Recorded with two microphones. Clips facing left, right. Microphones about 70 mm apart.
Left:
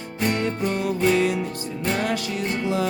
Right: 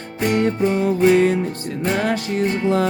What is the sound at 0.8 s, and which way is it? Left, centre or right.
Music, right.